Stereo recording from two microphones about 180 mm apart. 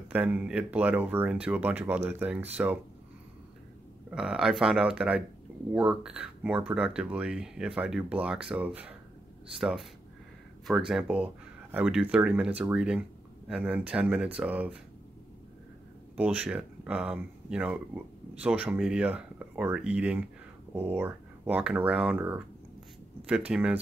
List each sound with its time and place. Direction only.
0.1 s speech: 10° right (ahead or behind)
4.1 s speech: 5° right (ahead or behind)
16.2 s speech: 5° right (ahead or behind)